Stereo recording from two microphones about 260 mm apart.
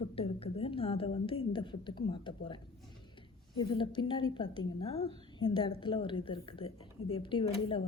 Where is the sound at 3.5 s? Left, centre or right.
Centre.